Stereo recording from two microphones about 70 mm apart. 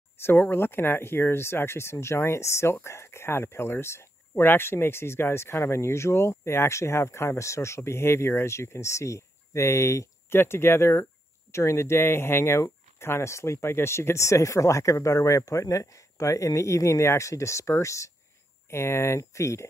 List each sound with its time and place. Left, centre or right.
0.2 s speech: left
10.4 s speech: left